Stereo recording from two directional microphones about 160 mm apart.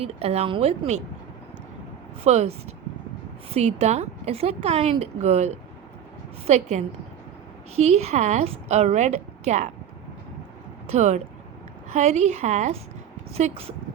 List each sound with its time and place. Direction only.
0.0 s a woman's voice: 40° right (ahead or behind)
2.2 s a woman's voice: 40° right (ahead or behind)
6.5 s a woman's voice: 45° right (ahead or behind)
10.8 s a woman's voice: 45° right (ahead or behind)